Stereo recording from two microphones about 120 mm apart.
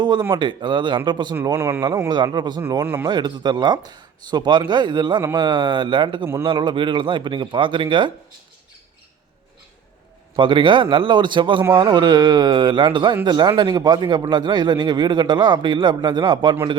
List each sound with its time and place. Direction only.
0.0 s a man's voice: 40° right (ahead or behind)
1.5 s speech: 20° right (ahead or behind)
2.0 s a man's voice: 40° right (ahead or behind)
2.8 s speech: 20° right (ahead or behind)
3.1 s a man's voice: 35° right (ahead or behind)
10.3 s a man's voice: 45° right (ahead or behind)